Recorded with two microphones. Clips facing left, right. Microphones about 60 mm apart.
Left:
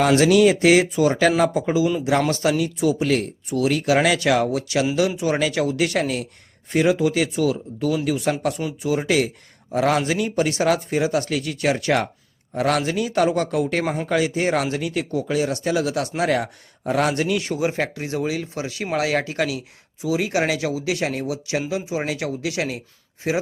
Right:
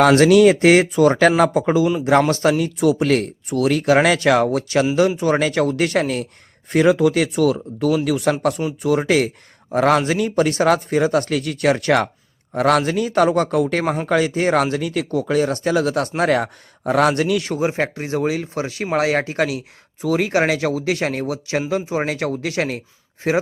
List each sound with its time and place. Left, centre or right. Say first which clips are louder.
0.0 s speech: right 4 dB; right
2.0 s speech: right 4 dB; right
17.6 s speech: right 2 dB; right
20.0 s speech: right 3 dB; right
20.2 s speech: right 4 dB; right